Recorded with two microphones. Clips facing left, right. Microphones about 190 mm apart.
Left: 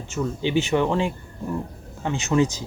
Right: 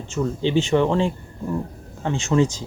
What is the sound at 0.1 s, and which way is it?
Speech, 15° left (ahead or behind).